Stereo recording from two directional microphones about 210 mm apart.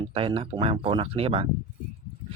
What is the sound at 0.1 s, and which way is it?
Speech, 25° right (ahead or behind).